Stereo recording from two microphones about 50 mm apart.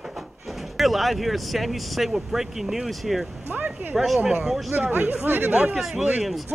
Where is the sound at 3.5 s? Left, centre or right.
Right.